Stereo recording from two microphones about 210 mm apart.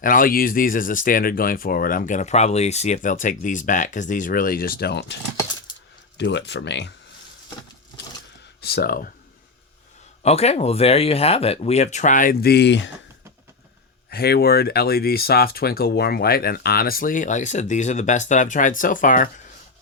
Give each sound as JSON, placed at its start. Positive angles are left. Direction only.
{"t": 0.0, "sound": "speech", "side_deg": 40}
{"t": 6.1, "sound": "speech", "side_deg": 55}
{"t": 8.6, "sound": "speech", "side_deg": 50}
{"t": 10.2, "sound": "speech", "side_deg": 30}
{"t": 14.1, "sound": "speech", "side_deg": 50}